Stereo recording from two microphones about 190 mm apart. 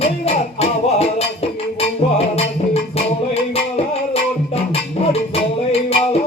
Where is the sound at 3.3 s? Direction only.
30° left (ahead or behind).